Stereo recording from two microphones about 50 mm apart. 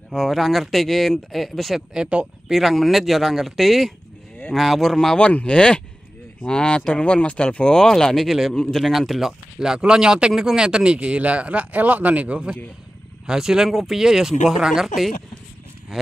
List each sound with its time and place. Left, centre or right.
0.1 s speech: centre
2.0 s speech: right
2.4 s speech: centre
4.9 s speech: centre
8.5 s speech: centre
8.8 s speech: centre
9.6 s speech: centre
13.3 s speech: centre